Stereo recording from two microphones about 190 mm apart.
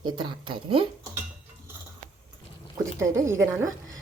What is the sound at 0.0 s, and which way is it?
Speech, 25° right (ahead or behind).